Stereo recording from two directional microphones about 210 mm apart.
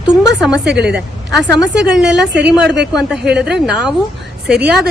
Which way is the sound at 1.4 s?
5° right (ahead or behind).